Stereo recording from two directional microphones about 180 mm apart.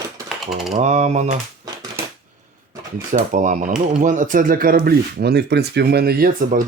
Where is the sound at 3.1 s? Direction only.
45° right (ahead or behind).